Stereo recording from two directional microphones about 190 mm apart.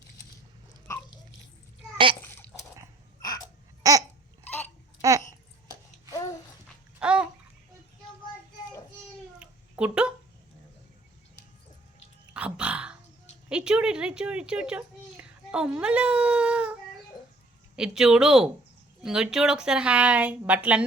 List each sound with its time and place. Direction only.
2.2 s a sound: 10° left (ahead or behind)
3.2 s music: 20° left (ahead or behind)
3.8 s babbling: 15° right (ahead or behind)
6.1 s babbling: 20° left (ahead or behind)
7.0 s babbling: 5° right (ahead or behind)
9.4 s cat: 5° right (ahead or behind)
12.3 s a sound: 5° right (ahead or behind)
17.7 s speech: 5° right (ahead or behind)